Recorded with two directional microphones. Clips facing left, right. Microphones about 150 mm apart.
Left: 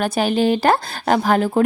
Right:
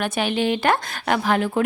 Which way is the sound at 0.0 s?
40° left (ahead or behind).